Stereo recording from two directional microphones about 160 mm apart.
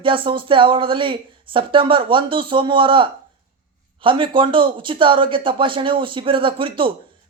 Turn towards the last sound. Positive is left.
turn(degrees=-35)  # may be behind; listen again after turning